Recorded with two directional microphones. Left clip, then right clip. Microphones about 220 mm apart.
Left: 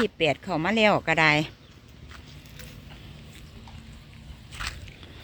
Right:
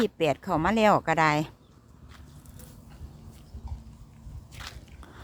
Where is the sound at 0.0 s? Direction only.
10° right (ahead or behind).